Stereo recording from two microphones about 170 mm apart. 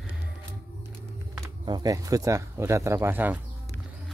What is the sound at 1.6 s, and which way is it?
Speech, 25° right (ahead or behind).